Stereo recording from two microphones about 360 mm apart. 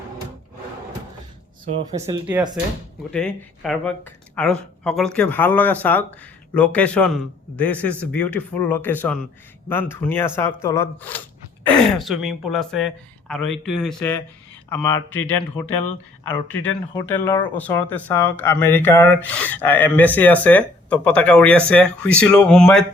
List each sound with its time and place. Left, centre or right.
1.9 s speech: centre
3.1 s speech: centre
15.3 s speech: left
16.9 s speech: centre